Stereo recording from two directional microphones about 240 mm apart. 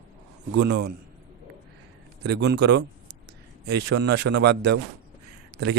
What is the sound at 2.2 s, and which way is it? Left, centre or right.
A man's voice, right.